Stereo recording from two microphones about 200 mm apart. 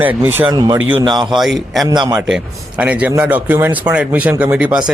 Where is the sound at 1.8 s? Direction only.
20° right (ahead or behind).